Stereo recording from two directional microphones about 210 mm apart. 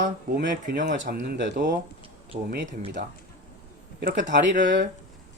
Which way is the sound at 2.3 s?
35° right (ahead or behind).